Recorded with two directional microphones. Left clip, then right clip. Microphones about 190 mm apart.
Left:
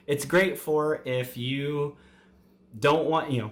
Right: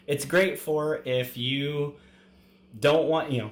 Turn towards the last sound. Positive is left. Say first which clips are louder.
# right 1 dB
turn(degrees=30)  # may be behind; listen again after turning